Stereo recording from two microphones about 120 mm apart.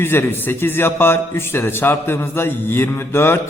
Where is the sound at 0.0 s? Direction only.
20° left (ahead or behind).